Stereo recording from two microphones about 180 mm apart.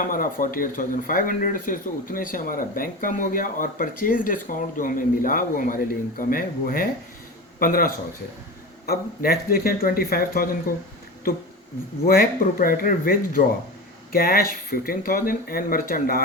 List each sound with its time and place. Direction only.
0.0 s speech: 50° left (ahead or behind)
8.9 s speech: 60° left (ahead or behind)
12.0 s speech: 55° left (ahead or behind)